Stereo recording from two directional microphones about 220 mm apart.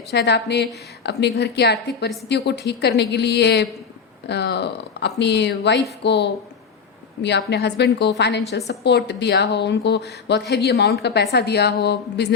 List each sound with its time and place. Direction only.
0.1 s a woman's voice: 50° left (ahead or behind)